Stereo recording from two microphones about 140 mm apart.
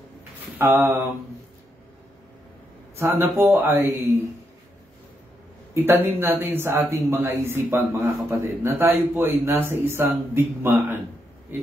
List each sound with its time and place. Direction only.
0.6 s a man's voice: 15° right (ahead or behind)
3.0 s a man's voice: 15° right (ahead or behind)
5.8 s a man's voice: 15° right (ahead or behind)